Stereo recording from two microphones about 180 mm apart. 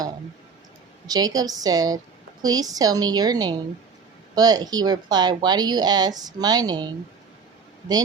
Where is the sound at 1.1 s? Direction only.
20° right (ahead or behind).